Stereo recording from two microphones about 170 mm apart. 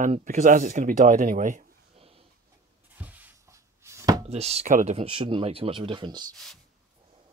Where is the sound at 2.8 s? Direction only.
10° right (ahead or behind).